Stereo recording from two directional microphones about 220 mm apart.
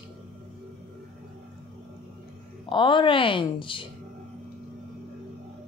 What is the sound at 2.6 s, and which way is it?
A woman's voice, 20° left (ahead or behind).